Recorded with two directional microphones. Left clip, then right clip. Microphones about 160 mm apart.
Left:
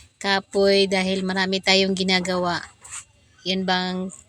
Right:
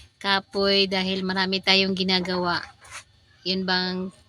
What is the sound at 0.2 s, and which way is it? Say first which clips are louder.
A woman's voice: left 3 dB; 30° left (ahead or behind).